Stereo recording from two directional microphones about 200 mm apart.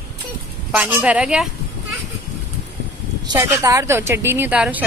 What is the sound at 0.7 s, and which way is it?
Speech, 10° right (ahead or behind).